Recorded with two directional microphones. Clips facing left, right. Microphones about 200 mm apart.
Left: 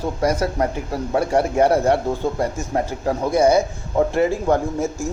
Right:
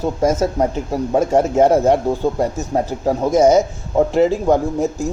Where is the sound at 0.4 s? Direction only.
15° right (ahead or behind).